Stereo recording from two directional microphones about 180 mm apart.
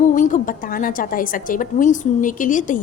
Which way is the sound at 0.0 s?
45° left (ahead or behind).